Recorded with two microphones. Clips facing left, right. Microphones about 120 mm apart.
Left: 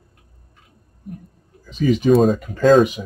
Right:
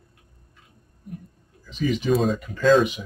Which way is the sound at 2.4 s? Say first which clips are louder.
Left 5 dB; 40° left (ahead or behind).